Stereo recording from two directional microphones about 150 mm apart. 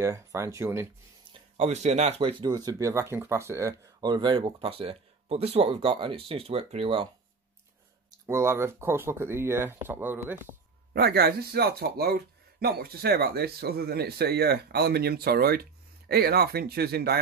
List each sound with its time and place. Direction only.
0.0 s speech: 20° right (ahead or behind)
1.6 s speech: 45° right (ahead or behind)
2.4 s speech: 25° right (ahead or behind)
3.8 s speech: 30° right (ahead or behind)
8.1 s speech: 20° right (ahead or behind)
10.9 s speech: 90° right